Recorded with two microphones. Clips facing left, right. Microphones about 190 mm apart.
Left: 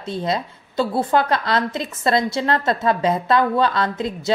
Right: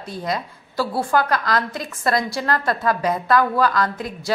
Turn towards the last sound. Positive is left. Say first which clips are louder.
# left 2 dB
turn(degrees=25)  # may be behind; listen again after turning